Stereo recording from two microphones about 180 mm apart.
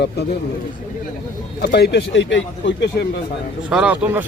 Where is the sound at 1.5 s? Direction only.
60° left (ahead or behind).